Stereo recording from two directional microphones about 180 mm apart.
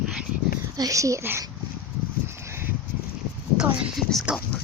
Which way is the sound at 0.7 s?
20° right (ahead or behind).